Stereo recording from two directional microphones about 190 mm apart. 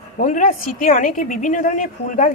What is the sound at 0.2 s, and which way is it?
A woman's voice, 40° left (ahead or behind).